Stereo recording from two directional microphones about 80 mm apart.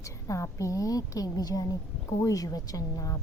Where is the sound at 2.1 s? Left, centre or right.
Left.